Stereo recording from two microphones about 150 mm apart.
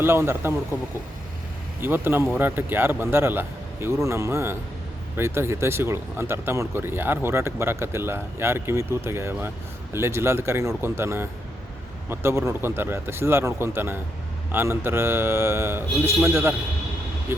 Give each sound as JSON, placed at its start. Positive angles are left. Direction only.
{"t": 0.0, "sound": "speech", "side_deg": -15}
{"t": 1.8, "sound": "speech", "side_deg": -15}